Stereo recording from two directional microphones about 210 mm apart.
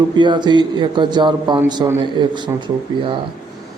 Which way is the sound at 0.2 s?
20° right (ahead or behind).